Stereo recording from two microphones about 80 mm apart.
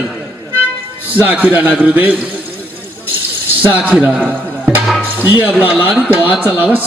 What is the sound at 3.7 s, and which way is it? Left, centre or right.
Speech, centre.